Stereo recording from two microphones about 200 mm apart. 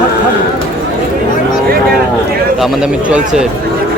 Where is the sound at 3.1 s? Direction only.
5° right (ahead or behind).